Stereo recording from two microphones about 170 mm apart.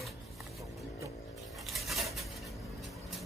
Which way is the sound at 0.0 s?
Centre (ahead or behind).